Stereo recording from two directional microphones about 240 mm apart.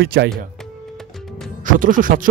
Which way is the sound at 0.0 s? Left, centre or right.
Right.